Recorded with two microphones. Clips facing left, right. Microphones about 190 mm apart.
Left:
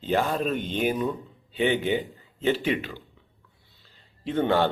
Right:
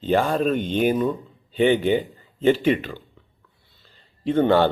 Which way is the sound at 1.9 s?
50° right (ahead or behind).